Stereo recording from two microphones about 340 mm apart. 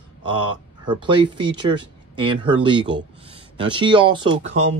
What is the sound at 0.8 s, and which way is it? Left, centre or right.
Speech, centre.